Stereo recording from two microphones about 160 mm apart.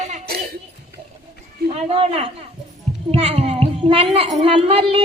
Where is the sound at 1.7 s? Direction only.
40° right (ahead or behind).